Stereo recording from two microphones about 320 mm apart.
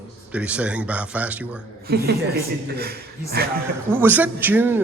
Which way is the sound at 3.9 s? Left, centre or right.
Centre.